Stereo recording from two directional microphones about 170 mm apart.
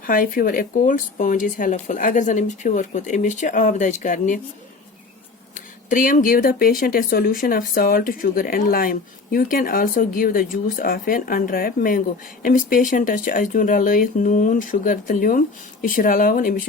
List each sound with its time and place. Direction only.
0.0 s speech: 55° left (ahead or behind)
5.5 s speech: 50° left (ahead or behind)